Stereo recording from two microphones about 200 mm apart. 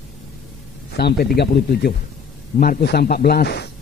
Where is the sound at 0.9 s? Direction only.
50° left (ahead or behind).